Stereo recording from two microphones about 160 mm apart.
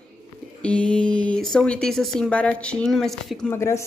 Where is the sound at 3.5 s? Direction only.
15° left (ahead or behind).